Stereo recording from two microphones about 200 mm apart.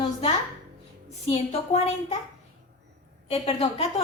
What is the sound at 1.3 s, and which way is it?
Speech, 30° left (ahead or behind).